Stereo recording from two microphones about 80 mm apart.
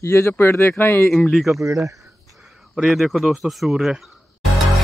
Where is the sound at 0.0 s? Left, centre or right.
Left.